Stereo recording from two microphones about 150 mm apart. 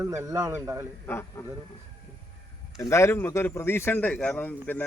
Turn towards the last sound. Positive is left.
turn(degrees=10)  # may be behind; listen again after turning